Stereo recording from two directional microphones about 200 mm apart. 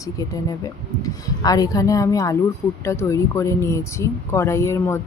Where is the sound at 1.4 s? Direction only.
20° left (ahead or behind).